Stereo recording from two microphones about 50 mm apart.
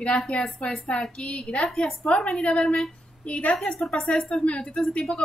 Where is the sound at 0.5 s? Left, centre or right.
Left.